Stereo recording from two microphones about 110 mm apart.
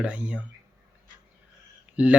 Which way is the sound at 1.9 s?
10° right (ahead or behind).